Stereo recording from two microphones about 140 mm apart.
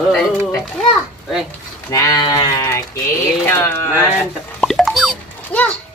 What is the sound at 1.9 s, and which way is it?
Sheep, 25° left (ahead or behind).